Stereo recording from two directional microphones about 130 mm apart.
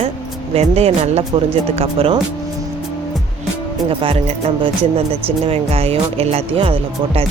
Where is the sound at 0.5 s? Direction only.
50° right (ahead or behind).